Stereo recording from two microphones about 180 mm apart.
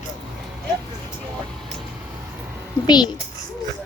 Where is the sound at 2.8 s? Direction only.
25° left (ahead or behind).